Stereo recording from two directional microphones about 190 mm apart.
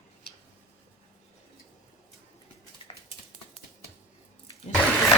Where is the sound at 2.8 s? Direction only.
30° left (ahead or behind).